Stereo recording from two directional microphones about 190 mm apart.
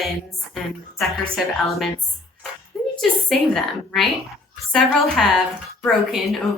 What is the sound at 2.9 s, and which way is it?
A woman's voice, centre (ahead or behind).